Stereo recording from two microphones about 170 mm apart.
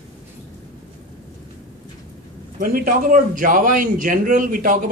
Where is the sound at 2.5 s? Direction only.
55° right (ahead or behind).